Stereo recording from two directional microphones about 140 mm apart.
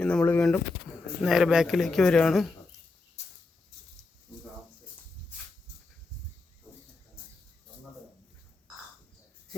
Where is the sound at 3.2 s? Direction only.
50° left (ahead or behind).